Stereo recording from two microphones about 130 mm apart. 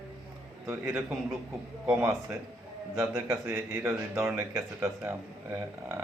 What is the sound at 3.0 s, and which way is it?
Speech, 20° right (ahead or behind).